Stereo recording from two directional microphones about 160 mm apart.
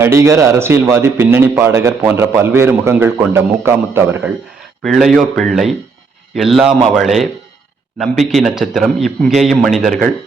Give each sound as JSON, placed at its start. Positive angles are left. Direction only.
{"t": 0.0, "sound": "a man's voice", "side_deg": -15}
{"t": 4.8, "sound": "a man's voice", "side_deg": 0}